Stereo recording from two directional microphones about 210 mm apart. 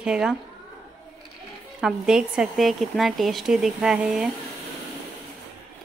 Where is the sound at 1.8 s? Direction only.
5° right (ahead or behind).